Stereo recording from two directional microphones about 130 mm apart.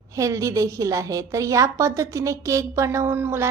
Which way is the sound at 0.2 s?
25° right (ahead or behind).